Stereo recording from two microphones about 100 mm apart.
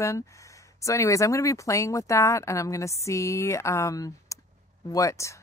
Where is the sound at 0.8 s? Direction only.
30° left (ahead or behind).